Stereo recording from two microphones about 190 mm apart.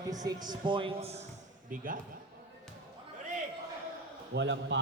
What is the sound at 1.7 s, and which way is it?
Speech, 45° right (ahead or behind).